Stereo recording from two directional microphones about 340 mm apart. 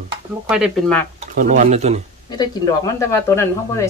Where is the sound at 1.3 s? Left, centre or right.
Right.